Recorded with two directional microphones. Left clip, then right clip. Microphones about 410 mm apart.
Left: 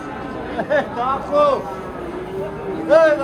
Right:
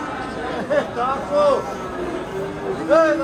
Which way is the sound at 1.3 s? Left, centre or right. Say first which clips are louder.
Left 2 dB; centre.